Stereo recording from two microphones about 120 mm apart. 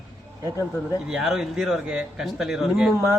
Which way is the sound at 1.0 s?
5° right (ahead or behind).